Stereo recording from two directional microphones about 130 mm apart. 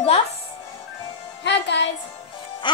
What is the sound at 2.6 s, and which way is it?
Music, 35° left (ahead or behind).